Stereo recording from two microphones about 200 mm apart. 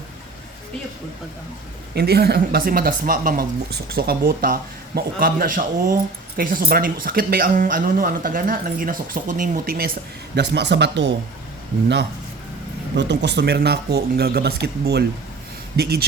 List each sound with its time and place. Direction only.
2.0 s speech: 55° right (ahead or behind)
10.3 s speech: 60° right (ahead or behind)
13.0 s speech: 60° right (ahead or behind)